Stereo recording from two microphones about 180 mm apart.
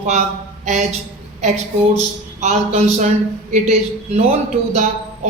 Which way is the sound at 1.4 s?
40° right (ahead or behind).